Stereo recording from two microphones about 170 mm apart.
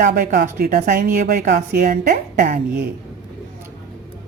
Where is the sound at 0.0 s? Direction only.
55° right (ahead or behind).